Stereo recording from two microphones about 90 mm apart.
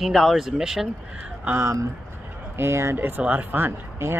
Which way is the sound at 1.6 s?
35° right (ahead or behind).